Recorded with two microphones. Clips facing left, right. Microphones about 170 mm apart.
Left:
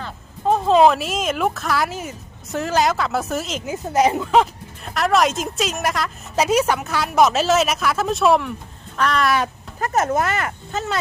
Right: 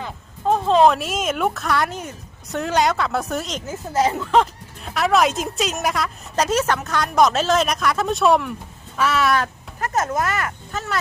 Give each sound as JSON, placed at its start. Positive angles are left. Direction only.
{"t": 0.4, "sound": "speech", "side_deg": 5}
{"t": 3.9, "sound": "speech", "side_deg": 15}
{"t": 4.4, "sound": "speech", "side_deg": 0}
{"t": 9.8, "sound": "speech", "side_deg": 30}